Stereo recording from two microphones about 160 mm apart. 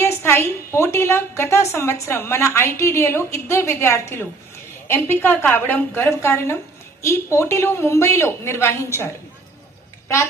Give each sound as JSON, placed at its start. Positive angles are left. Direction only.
{"t": 0.0, "sound": "a woman's voice", "side_deg": 15}